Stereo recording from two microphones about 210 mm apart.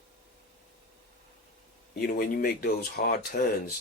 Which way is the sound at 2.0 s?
45° left (ahead or behind).